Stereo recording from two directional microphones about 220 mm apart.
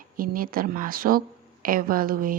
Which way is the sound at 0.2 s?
40° right (ahead or behind).